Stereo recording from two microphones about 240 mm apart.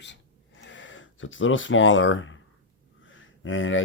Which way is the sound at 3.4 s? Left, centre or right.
Left.